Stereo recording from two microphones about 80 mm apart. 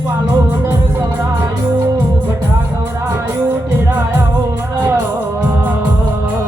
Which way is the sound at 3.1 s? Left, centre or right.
Right.